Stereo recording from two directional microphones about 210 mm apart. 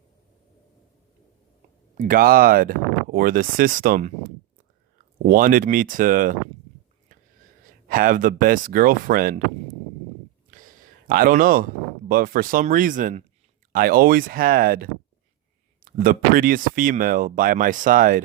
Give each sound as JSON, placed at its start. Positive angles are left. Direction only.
{"t": 2.0, "sound": "speech", "side_deg": -40}
{"t": 5.3, "sound": "speech", "side_deg": -40}
{"t": 7.9, "sound": "speech", "side_deg": -40}
{"t": 10.5, "sound": "speech", "side_deg": -40}